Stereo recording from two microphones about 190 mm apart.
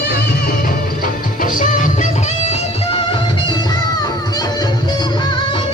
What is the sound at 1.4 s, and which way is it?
Music, 40° left (ahead or behind).